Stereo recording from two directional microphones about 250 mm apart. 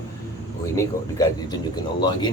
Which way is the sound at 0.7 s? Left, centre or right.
Centre.